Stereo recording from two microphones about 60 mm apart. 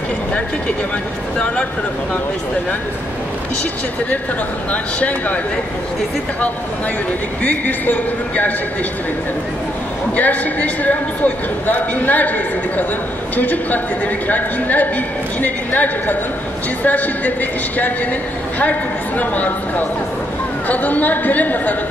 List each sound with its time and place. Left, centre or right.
7.4 s a man's voice: left
10.1 s a man's voice: left